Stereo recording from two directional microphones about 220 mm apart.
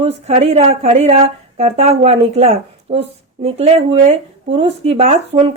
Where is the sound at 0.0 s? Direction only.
30° right (ahead or behind).